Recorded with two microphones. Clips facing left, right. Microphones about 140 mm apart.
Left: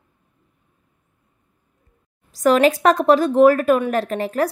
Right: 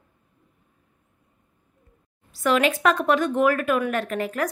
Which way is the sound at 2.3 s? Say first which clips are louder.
Left 6 dB; 40° left (ahead or behind).